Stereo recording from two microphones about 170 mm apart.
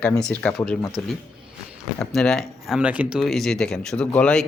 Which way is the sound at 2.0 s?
Centre (ahead or behind).